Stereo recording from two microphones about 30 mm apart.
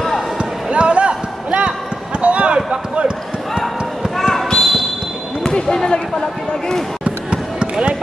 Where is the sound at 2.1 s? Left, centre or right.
Right.